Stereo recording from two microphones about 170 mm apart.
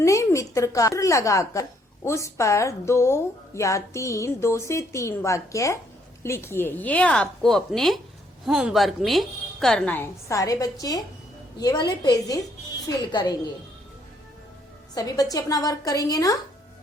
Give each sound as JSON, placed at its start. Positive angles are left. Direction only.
{"t": 0.0, "sound": "a woman's voice", "side_deg": 15}
{"t": 14.9, "sound": "a woman's voice", "side_deg": 20}